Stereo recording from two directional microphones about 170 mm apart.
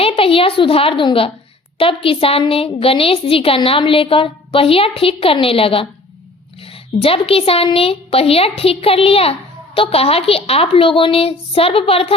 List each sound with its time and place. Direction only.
0.1 s a woman's voice: 35° left (ahead or behind)